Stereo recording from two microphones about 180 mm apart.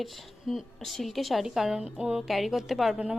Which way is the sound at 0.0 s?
Centre (ahead or behind).